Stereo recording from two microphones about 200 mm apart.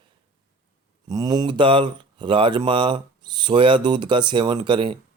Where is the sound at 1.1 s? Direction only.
20° right (ahead or behind).